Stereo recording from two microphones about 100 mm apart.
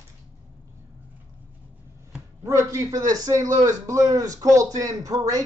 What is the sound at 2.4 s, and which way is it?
A man's voice, 30° right (ahead or behind).